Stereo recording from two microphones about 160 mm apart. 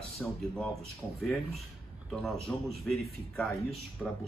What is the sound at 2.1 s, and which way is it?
Speech, centre (ahead or behind).